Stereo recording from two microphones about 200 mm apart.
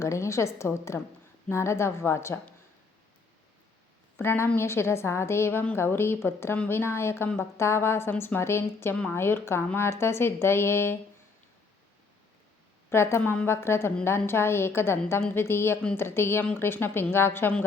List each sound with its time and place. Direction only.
0.0 s a woman's voice: 15° left (ahead or behind)
4.2 s a woman's voice: 10° left (ahead or behind)
12.9 s a woman's voice: 10° left (ahead or behind)